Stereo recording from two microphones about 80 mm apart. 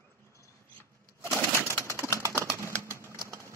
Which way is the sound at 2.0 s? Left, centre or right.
Right.